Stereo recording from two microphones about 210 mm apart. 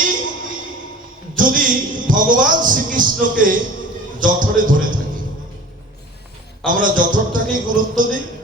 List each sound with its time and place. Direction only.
1.4 s a man's voice: 40° right (ahead or behind)
6.7 s a man's voice: 40° right (ahead or behind)